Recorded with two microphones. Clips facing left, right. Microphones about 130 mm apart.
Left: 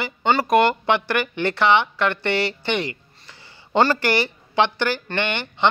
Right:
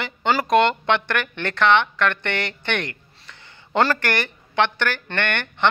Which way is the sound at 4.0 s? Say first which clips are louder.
Left 3 dB; 10° left (ahead or behind).